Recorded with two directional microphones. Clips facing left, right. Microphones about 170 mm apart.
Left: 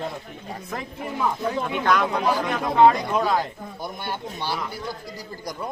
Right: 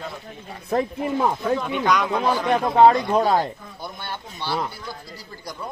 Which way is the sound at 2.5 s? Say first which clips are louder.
Right 3 dB; 35° right (ahead or behind).